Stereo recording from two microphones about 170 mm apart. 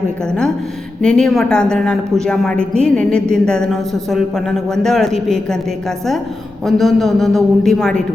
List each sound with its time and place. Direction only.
1.0 s a woman's voice: 5° left (ahead or behind)
6.7 s a woman's voice: centre (ahead or behind)